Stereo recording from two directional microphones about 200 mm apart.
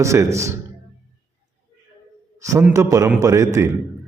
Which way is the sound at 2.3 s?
15° right (ahead or behind).